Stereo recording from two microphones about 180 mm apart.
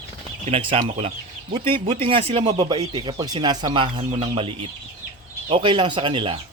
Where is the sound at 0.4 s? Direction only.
30° right (ahead or behind).